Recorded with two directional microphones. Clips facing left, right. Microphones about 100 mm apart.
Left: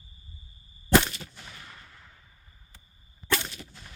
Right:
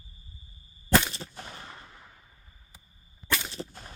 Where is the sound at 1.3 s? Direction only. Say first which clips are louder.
Right 4 dB; 40° right (ahead or behind); by 2.1 s 20° right (ahead or behind).